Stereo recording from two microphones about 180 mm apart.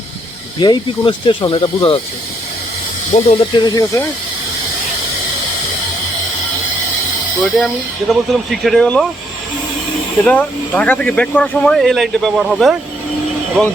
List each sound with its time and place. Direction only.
0.6 s speech: 25° left (ahead or behind)
3.1 s speech: 35° left (ahead or behind)
3.6 s speech: 20° left (ahead or behind)
7.4 s speech: centre (ahead or behind)
10.2 s speech: 10° left (ahead or behind)